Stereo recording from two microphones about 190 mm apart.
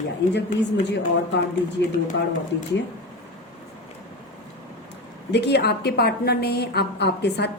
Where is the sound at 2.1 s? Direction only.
80° left.